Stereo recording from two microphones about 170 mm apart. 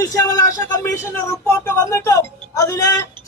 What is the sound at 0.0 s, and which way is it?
Speech, 20° left (ahead or behind).